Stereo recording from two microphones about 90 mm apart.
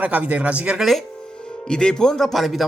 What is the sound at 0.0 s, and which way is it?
Speech, 15° right (ahead or behind).